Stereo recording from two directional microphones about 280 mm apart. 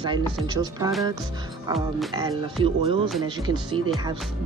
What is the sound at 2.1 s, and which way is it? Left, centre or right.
Speech, centre.